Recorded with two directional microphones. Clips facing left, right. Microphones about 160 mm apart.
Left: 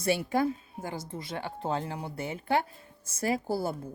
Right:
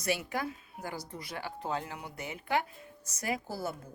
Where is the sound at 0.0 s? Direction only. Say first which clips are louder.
Left 6 dB; 30° left (ahead or behind).